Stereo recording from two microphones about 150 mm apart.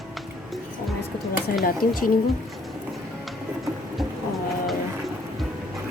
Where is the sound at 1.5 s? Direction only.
75° left (ahead or behind).